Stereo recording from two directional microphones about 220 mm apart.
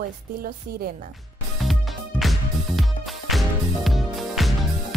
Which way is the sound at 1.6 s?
Centre (ahead or behind).